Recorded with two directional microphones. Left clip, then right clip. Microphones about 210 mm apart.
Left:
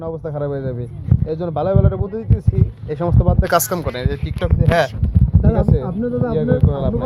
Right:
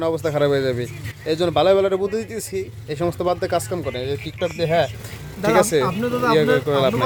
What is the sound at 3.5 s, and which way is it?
Speech, 5° left (ahead or behind).